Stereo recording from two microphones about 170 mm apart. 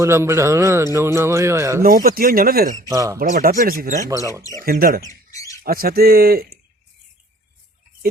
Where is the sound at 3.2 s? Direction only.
55° right (ahead or behind).